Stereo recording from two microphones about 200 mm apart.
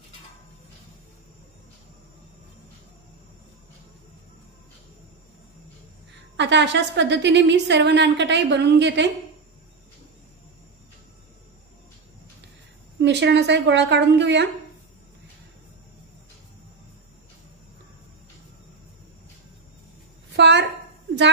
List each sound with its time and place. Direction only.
6.3 s a woman's voice: 60° right (ahead or behind)
13.0 s a woman's voice: 60° right (ahead or behind)
20.3 s a sound: 60° right (ahead or behind)